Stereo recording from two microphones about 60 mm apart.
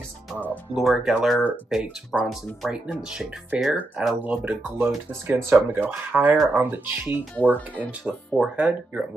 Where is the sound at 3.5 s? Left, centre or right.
Right.